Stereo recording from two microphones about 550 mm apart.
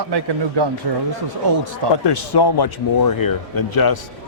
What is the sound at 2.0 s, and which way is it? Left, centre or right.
Speech, left.